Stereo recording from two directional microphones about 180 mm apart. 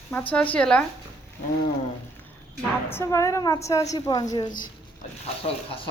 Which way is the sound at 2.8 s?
15° left (ahead or behind).